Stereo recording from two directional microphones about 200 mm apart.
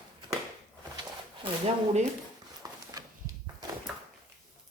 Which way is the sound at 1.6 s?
35° right (ahead or behind).